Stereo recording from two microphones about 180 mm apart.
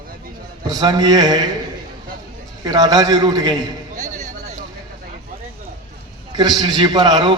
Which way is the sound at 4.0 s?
45° right (ahead or behind).